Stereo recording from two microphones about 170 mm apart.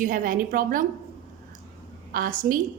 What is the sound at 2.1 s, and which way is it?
Speech, 55° right (ahead or behind).